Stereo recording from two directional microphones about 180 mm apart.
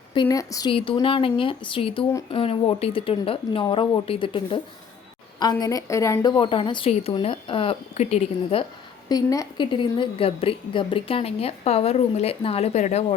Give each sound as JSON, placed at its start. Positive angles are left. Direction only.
{"t": 0.1, "sound": "a woman's voice", "side_deg": 25}
{"t": 9.0, "sound": "speech", "side_deg": 20}